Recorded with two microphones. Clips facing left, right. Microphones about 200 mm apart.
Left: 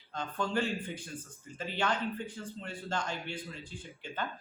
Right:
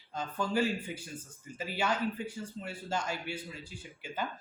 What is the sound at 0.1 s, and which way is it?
Speech, 5° right (ahead or behind).